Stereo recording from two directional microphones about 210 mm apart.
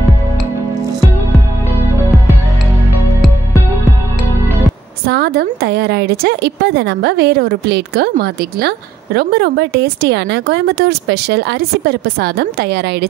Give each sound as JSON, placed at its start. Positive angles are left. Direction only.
{"t": 5.0, "sound": "a woman's voice", "side_deg": -50}